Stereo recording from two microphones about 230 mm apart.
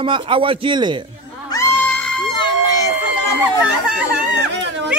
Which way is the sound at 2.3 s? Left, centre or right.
Centre.